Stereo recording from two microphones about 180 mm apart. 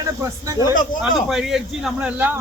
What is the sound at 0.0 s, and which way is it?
Speech, 20° right (ahead or behind).